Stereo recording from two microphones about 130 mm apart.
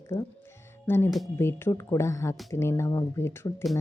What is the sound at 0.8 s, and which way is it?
Speech, 15° left (ahead or behind).